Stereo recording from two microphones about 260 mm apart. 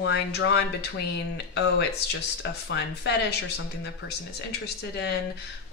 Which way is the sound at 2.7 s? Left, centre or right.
Left.